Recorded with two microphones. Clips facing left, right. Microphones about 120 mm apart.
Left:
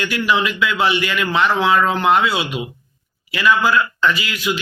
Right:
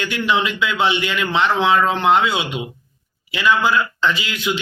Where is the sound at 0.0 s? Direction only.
25° right (ahead or behind).